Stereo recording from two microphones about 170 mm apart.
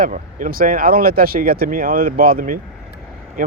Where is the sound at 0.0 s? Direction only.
50° right (ahead or behind).